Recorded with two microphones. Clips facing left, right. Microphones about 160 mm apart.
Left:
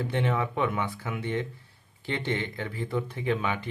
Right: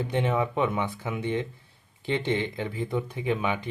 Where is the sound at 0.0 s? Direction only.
20° right (ahead or behind).